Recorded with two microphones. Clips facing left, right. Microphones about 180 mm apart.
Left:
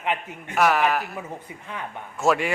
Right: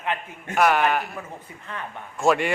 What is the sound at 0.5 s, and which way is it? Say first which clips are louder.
A man's voice: right 1 dB; centre (ahead or behind).